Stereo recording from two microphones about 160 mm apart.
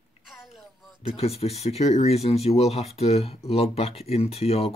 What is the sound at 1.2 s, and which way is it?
Speech, 40° left (ahead or behind).